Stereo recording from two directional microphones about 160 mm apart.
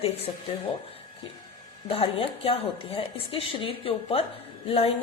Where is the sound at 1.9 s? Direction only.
35° left (ahead or behind).